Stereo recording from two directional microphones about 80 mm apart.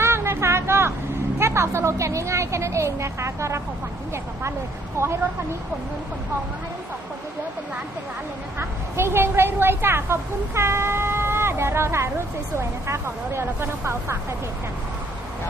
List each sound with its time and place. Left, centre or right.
0.0 s a sound: right
1.4 s a woman's voice: right
5.0 s a woman's voice: right
8.5 s a woman's voice: right